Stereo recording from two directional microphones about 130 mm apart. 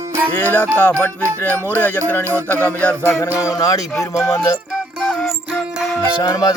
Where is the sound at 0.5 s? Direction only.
15° left (ahead or behind).